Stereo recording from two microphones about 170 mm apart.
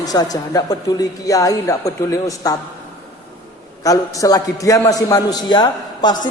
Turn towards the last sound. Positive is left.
turn(degrees=25)  # may be behind; listen again after turning